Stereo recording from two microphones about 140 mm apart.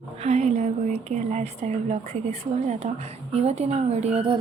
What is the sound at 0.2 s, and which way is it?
A woman's voice, 50° right (ahead or behind).